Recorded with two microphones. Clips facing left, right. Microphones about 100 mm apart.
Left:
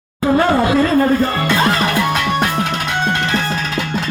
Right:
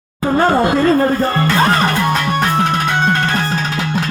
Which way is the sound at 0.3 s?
40° right (ahead or behind).